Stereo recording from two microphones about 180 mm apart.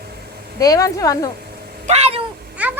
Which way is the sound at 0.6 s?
20° left (ahead or behind).